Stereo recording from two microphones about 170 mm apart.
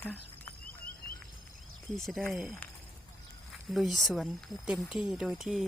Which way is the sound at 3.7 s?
Centre (ahead or behind).